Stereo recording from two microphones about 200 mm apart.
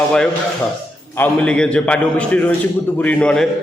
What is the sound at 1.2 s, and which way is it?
A man's voice, 5° left (ahead or behind).